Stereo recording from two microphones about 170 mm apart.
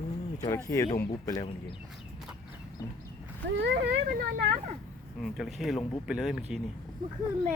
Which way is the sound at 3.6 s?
85° right.